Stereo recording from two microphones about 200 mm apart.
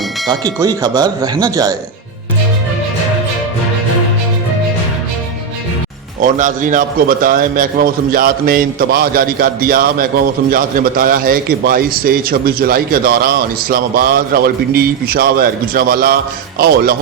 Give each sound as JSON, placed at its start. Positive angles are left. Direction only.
{"t": 0.3, "sound": "speech", "side_deg": -20}
{"t": 6.2, "sound": "a man's voice", "side_deg": -40}